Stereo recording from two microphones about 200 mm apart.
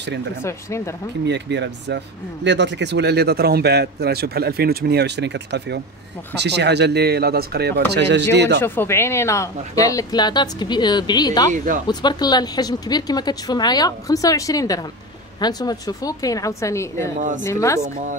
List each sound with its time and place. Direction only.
0.4 s a woman's voice: 15° left (ahead or behind)
1.2 s speech: 60° right (ahead or behind)
8.5 s a woman's voice: 10° left (ahead or behind)
11.5 s speech: 40° right (ahead or behind)
11.9 s a woman's voice: 20° left (ahead or behind)